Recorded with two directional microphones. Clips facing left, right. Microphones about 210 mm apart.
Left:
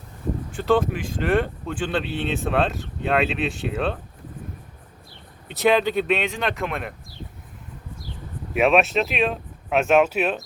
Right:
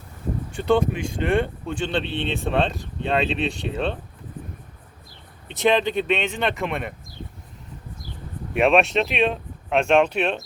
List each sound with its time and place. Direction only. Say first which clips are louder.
0.5 s speech: even; centre (ahead or behind)
5.5 s speech: left 1 dB; 5° left (ahead or behind)
8.5 s speech: even; centre (ahead or behind)